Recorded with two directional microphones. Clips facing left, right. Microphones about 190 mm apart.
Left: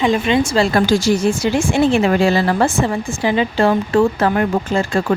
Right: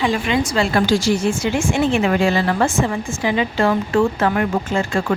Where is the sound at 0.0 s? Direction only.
20° left (ahead or behind).